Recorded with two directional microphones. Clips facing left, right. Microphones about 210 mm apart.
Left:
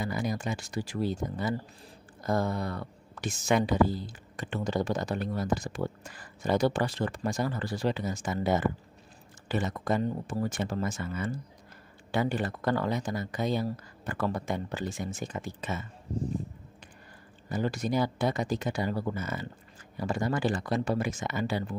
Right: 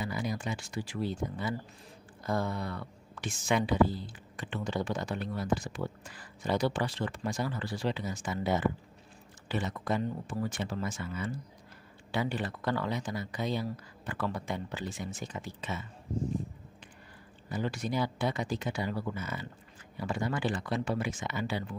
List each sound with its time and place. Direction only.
0.0 s speech: 45° left (ahead or behind)
17.5 s speech: 45° left (ahead or behind)